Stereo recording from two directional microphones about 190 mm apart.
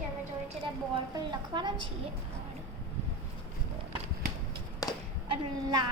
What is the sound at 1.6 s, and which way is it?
Speech, 25° right (ahead or behind).